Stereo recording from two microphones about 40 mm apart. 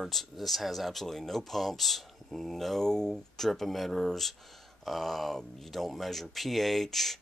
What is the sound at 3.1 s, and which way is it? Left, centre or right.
Speech, centre.